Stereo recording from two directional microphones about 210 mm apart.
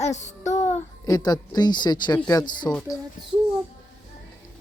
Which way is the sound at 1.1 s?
20° left (ahead or behind).